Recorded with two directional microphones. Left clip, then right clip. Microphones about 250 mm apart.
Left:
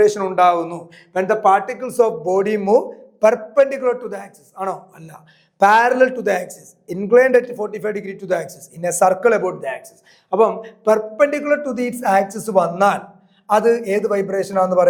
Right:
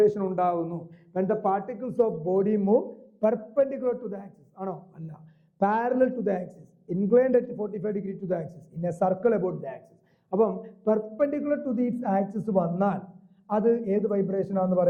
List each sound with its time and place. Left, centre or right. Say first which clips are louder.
0.0 s a man's voice: left 9 dB; centre
2.0 s a man's voice: left 8 dB; centre
2.7 s a man's voice: left 9 dB; left
4.9 s a man's voice: left 7 dB; centre
8.9 s a man's voice: left 10 dB; centre